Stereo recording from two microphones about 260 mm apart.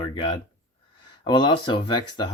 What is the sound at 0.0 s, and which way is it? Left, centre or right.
Speech, centre.